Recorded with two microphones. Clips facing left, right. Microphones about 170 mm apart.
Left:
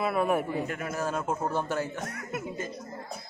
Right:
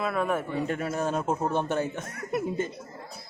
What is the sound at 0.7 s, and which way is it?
A man's voice, 30° right (ahead or behind).